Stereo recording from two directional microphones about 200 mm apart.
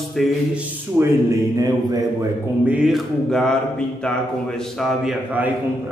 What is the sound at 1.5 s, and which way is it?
Mantra, 20° right (ahead or behind).